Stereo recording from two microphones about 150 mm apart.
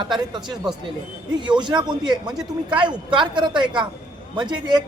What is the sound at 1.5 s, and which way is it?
A man's voice, 30° right (ahead or behind).